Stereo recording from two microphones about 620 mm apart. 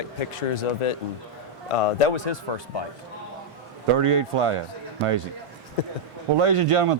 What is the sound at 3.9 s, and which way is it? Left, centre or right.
Speech, right.